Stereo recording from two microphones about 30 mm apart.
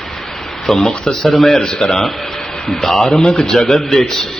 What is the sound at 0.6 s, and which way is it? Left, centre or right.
Speech, centre.